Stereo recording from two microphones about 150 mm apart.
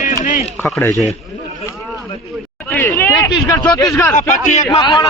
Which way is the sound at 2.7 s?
15° left (ahead or behind).